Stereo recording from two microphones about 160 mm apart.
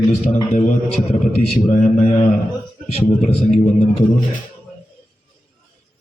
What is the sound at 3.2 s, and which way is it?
Speech, 50° left (ahead or behind).